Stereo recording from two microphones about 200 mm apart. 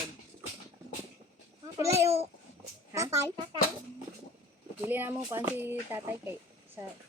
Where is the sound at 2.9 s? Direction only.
15° right (ahead or behind).